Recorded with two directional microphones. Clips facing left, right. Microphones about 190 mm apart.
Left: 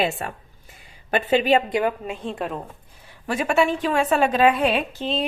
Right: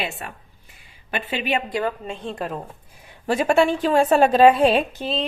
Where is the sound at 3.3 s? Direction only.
30° right (ahead or behind).